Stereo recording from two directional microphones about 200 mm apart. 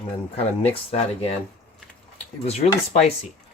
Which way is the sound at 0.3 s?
30° left (ahead or behind).